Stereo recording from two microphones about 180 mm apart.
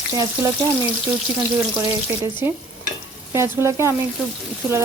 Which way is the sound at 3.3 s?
15° right (ahead or behind).